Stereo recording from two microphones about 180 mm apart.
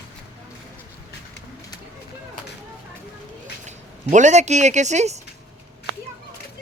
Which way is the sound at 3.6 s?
40° right (ahead or behind).